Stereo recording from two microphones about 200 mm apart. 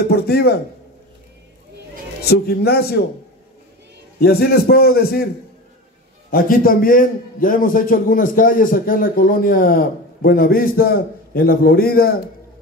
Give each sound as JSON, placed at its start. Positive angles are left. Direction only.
{"t": 0.1, "sound": "a man's voice", "side_deg": 55}
{"t": 2.2, "sound": "a man's voice", "side_deg": 50}
{"t": 4.2, "sound": "a man's voice", "side_deg": 50}
{"t": 6.3, "sound": "a man's voice", "side_deg": 45}